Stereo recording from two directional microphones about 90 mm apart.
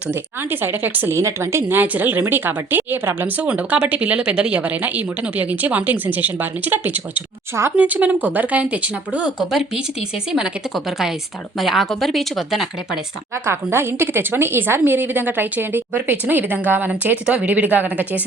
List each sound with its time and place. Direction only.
0.1 s speech: 25° right (ahead or behind); by 9.8 s 10° right (ahead or behind)
11.6 s speech: centre (ahead or behind)
13.4 s speech: 30° right (ahead or behind)